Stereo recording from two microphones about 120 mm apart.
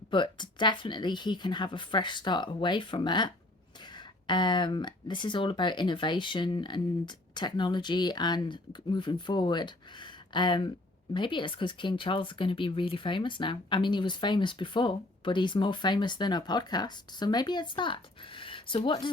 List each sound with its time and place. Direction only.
0.1 s speech: 40° left (ahead or behind)